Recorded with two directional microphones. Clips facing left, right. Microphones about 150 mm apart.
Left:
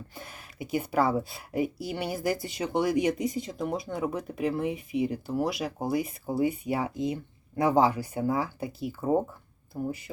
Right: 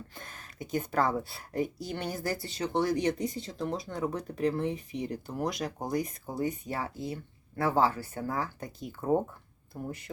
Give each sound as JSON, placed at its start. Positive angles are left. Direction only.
{"t": 0.1, "sound": "speech", "side_deg": 10}